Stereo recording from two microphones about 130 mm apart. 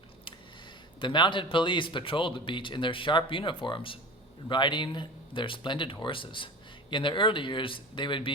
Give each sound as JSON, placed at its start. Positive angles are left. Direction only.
{"t": 0.9, "sound": "speech", "side_deg": 35}